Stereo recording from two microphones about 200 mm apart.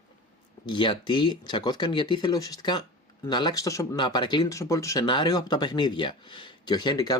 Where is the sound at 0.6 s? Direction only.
20° left (ahead or behind).